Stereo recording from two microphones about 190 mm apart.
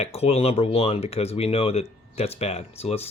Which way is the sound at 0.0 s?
35° left (ahead or behind).